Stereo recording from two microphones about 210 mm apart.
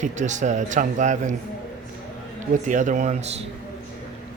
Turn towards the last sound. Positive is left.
turn(degrees=-35)  # may be behind; listen again after turning